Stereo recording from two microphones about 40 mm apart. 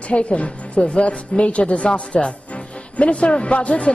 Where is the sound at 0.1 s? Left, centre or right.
Left.